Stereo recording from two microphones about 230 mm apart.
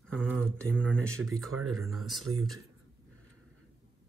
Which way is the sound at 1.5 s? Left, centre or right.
Right.